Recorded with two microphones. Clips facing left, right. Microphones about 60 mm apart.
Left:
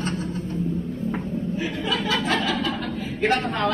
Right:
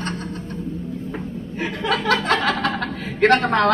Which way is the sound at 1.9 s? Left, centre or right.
Right.